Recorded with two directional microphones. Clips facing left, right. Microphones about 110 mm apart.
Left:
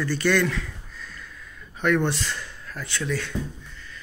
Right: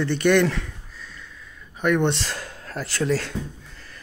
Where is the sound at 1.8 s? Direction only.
15° right (ahead or behind).